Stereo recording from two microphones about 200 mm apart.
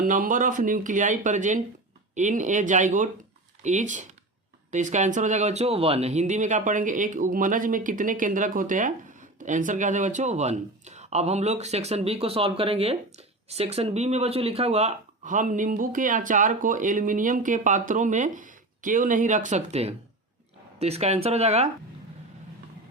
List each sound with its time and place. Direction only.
0.0 s speech: 40° right (ahead or behind)